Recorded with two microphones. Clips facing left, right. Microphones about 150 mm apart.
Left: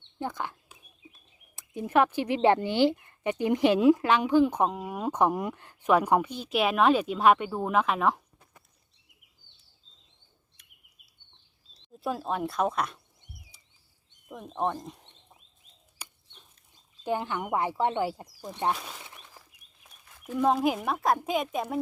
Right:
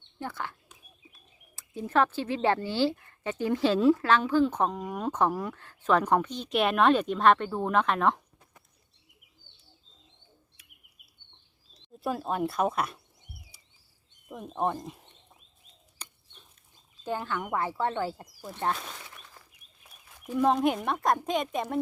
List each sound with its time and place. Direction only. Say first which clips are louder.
0.2 s speech: left 3 dB; 15° left (ahead or behind)
1.5 s speech: left 2 dB; 15° left (ahead or behind)
11.9 s a woman's voice: right 1 dB; centre (ahead or behind)
13.5 s patter: right 1 dB; 10° right (ahead or behind)
14.3 s speech: even; 5° right (ahead or behind)
16.0 s bird: left 1 dB; 10° left (ahead or behind)
17.0 s speech: left 2 dB; 15° left (ahead or behind)
18.9 s a sound: even; 20° left (ahead or behind)
19.8 s a sound: right 1 dB; 10° right (ahead or behind)
20.4 s a woman's voice: even; 5° left (ahead or behind)